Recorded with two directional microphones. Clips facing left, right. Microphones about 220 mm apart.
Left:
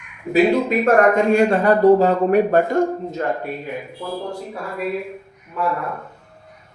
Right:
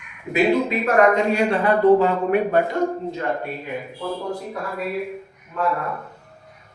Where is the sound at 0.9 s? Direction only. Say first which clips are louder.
Left 3 dB; 50° left (ahead or behind).